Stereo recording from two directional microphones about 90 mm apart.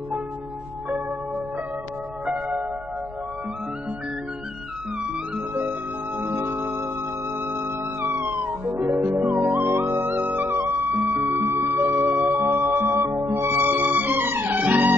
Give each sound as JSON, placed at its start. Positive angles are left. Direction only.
{"t": 5.5, "sound": "music", "side_deg": -20}